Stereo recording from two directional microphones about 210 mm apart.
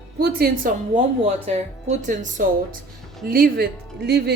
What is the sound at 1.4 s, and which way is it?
Speech, 35° right (ahead or behind).